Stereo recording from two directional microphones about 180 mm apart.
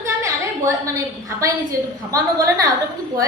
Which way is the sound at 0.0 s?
15° right (ahead or behind).